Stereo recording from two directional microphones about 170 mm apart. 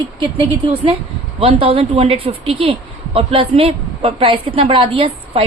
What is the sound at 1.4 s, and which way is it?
A woman's voice, 35° right (ahead or behind).